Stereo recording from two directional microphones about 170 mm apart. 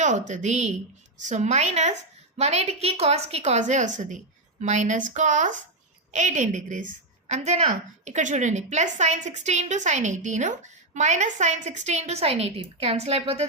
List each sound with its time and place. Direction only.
0.0 s a woman's voice: 45° right (ahead or behind)